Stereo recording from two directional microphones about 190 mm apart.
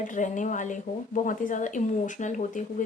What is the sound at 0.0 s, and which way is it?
Speech, 40° left (ahead or behind).